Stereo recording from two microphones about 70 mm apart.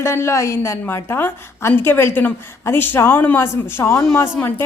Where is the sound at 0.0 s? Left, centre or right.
Left.